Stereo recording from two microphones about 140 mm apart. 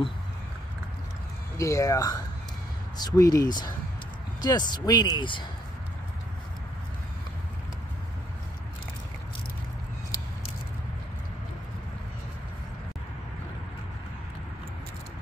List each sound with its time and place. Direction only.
1.6 s speech: 20° left (ahead or behind)